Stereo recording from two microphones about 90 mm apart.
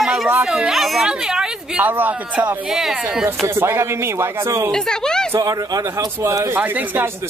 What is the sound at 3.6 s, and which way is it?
Speech, 25° right (ahead or behind).